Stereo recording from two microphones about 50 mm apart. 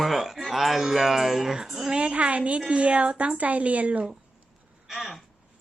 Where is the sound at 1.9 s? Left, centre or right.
Right.